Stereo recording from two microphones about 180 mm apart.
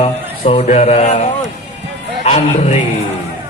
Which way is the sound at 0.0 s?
35° left (ahead or behind).